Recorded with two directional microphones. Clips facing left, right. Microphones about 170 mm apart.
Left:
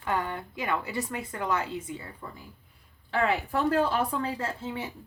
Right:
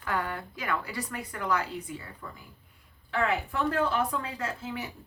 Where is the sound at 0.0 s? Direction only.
20° left (ahead or behind).